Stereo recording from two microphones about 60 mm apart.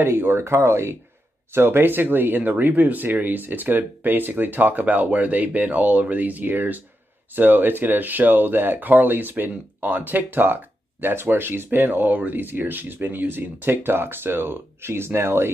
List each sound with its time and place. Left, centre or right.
0.0 s speech: right